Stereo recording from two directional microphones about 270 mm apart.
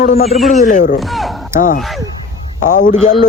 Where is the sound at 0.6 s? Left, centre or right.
Left.